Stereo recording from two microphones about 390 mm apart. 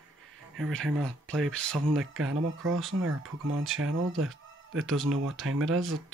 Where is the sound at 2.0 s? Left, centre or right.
Right.